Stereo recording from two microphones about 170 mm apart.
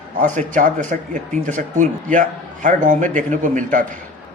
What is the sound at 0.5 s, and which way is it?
A man's voice, 50° right (ahead or behind).